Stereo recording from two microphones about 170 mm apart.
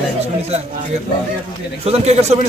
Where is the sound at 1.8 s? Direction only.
40° right (ahead or behind).